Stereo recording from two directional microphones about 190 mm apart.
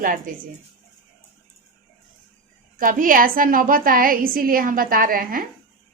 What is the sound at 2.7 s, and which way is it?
A woman's voice, 45° right (ahead or behind).